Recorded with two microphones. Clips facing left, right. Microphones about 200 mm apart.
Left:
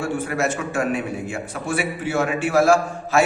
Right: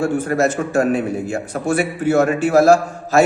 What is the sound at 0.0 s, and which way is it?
A man's voice, 40° right (ahead or behind).